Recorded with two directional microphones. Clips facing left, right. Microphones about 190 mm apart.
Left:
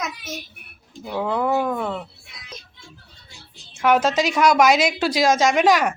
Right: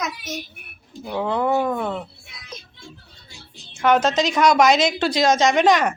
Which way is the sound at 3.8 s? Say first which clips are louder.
Even; 5° left (ahead or behind).